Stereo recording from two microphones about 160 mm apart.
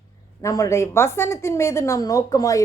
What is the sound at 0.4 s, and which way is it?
A woman's voice, 20° left (ahead or behind).